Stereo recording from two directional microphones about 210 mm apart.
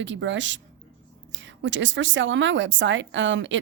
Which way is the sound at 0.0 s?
60° right (ahead or behind).